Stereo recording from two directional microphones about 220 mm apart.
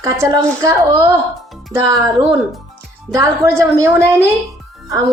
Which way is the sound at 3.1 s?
15° right (ahead or behind).